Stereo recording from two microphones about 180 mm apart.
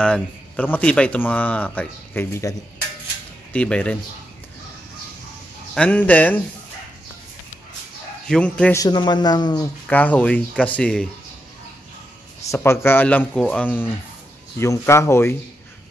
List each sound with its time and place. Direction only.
0.0 s speech: 5° left (ahead or behind)
3.5 s speech: 5° left (ahead or behind)
5.8 s speech: 10° left (ahead or behind)
8.3 s speech: 5° left (ahead or behind)
8.7 s a man's voice: 25° left (ahead or behind)
9.8 s speech: 10° left (ahead or behind)
12.4 s speech: 15° left (ahead or behind)